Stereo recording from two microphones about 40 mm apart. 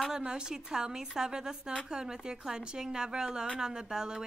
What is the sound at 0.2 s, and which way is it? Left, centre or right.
A woman's voice, right.